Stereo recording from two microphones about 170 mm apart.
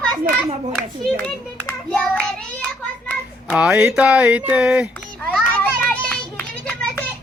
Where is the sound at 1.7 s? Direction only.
5° left (ahead or behind).